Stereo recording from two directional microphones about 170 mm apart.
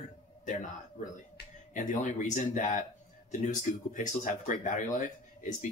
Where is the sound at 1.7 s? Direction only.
50° left (ahead or behind).